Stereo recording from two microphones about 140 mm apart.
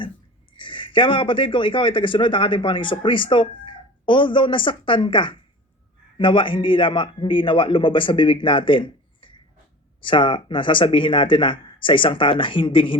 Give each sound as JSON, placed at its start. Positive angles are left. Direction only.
{"t": 0.5, "sound": "speech", "side_deg": 35}